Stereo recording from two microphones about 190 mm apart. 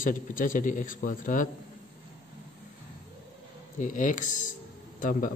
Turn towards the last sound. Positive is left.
turn(degrees=45)  # may be behind; listen again after turning